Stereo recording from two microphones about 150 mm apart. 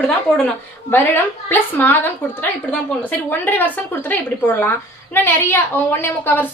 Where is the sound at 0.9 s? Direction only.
15° left (ahead or behind).